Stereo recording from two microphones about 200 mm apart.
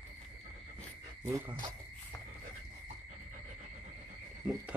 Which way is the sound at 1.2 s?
10° right (ahead or behind).